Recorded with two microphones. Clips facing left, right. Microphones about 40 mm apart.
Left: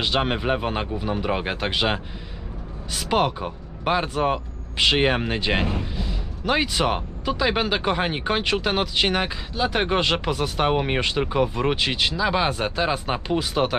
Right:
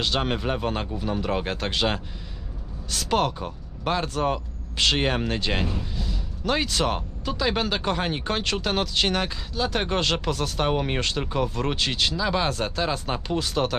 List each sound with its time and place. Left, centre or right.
0.0 s speech: centre